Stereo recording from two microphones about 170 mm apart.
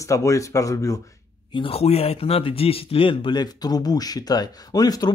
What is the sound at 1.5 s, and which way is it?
Speech, 35° left (ahead or behind).